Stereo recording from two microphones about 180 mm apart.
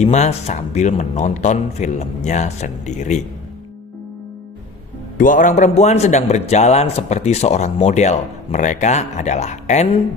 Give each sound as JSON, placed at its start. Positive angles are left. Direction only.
{"t": 0.0, "sound": "a man's voice", "side_deg": 40}
{"t": 5.1, "sound": "a man's voice", "side_deg": 45}